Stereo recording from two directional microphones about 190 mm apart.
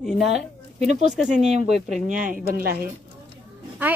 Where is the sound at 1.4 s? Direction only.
35° right (ahead or behind).